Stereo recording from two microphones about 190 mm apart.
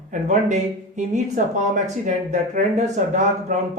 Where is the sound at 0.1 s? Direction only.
40° right (ahead or behind).